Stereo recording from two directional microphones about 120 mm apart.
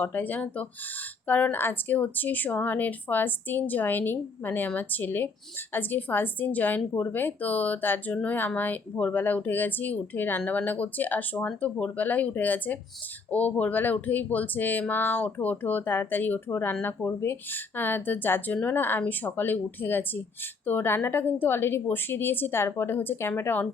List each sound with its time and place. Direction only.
0.0 s a woman's voice: 15° left (ahead or behind)